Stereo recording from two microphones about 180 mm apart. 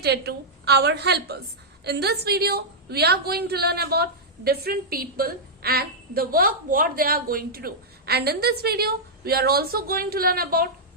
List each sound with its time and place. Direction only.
0.0 s a woman's voice: 65° right (ahead or behind)